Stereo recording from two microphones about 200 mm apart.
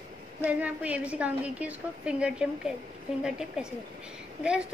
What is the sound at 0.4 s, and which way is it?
A woman's voice, 5° right (ahead or behind).